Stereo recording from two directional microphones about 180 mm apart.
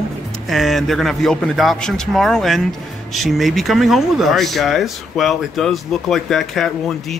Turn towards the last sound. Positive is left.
turn(degrees=0)  # may be behind; listen again after turning